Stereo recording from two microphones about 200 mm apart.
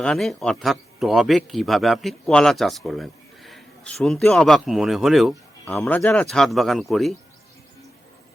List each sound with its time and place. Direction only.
0.0 s speech: 5° left (ahead or behind)